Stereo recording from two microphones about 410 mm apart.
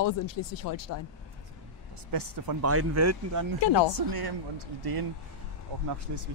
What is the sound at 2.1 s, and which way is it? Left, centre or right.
Speech, right.